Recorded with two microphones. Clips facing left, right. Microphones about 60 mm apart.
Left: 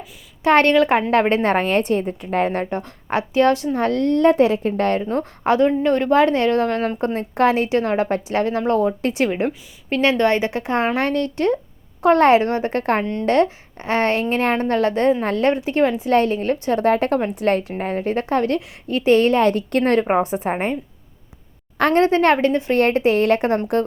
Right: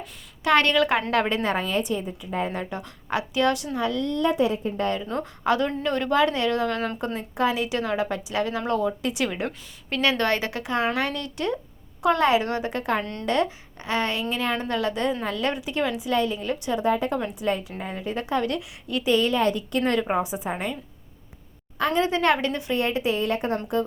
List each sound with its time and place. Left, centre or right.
0.4 s a woman's voice: left
2.6 s a woman's voice: left
3.8 s a woman's voice: left
5.0 s a woman's voice: left
9.9 s a woman's voice: left
16.8 s a woman's voice: left
21.8 s a woman's voice: left
22.0 s a woman's voice: left
22.7 s a woman's voice: left